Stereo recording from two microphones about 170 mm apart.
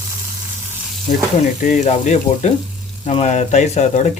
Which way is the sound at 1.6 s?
50° left (ahead or behind).